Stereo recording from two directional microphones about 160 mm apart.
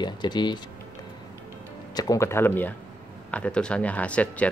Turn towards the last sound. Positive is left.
turn(degrees=10)  # may be behind; listen again after turning